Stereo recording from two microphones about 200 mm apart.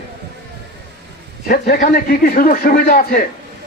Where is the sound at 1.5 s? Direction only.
50° left (ahead or behind).